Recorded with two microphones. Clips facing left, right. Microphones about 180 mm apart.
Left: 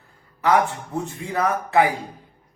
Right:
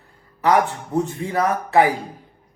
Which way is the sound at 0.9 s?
35° right (ahead or behind).